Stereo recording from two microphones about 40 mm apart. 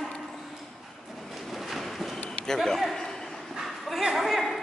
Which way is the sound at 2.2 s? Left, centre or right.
Centre.